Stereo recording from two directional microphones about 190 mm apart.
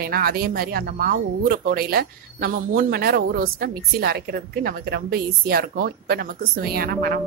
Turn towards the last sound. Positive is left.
turn(degrees=-50)  # may be behind; listen again after turning